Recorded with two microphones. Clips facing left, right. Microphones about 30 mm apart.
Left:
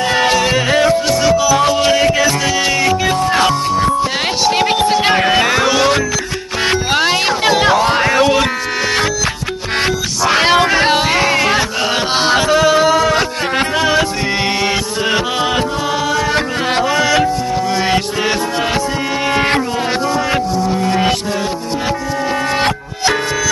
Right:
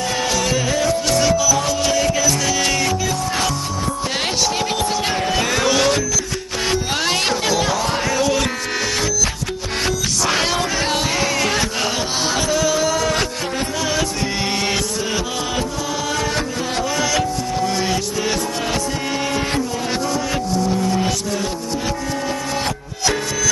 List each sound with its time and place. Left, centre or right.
0.1 s music: left
2.6 s music: left
3.1 s music: left
5.5 s music: centre
6.6 s music: left
7.4 s a sound: left
10.3 s music: left
12.2 s a sound: left
16.3 s music: left
19.3 s a sound: left